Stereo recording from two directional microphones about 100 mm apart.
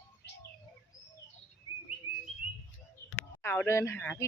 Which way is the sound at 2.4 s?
10° right (ahead or behind).